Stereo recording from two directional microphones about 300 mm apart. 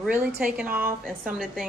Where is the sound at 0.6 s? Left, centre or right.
Right.